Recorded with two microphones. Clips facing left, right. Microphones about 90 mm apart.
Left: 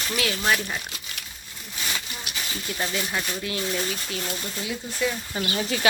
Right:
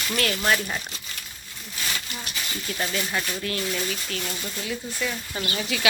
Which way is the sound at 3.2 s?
20° left (ahead or behind).